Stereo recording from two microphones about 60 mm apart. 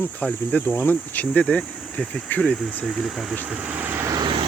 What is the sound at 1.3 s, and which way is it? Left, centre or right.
Speech, centre.